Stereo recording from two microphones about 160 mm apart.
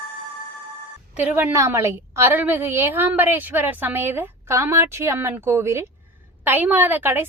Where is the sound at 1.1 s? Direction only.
10° right (ahead or behind).